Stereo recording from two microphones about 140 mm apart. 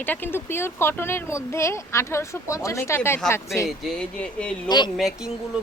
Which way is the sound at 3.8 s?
5° left (ahead or behind).